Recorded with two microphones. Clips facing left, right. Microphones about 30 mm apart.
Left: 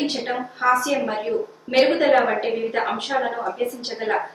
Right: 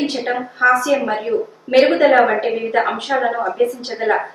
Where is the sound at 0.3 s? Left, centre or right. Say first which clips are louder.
Right 6 dB; centre.